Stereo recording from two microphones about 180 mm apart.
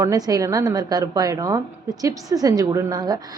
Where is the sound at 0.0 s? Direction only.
20° right (ahead or behind).